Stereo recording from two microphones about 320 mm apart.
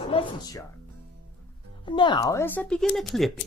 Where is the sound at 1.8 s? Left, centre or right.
Centre.